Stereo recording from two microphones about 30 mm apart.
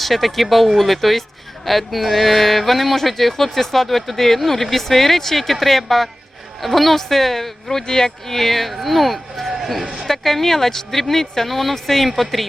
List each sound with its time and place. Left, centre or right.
0.0 s speech: centre
9.5 s a sound: centre
10.1 s speech: centre